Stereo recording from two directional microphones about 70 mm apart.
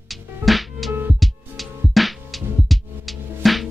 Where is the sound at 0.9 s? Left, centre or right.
Right.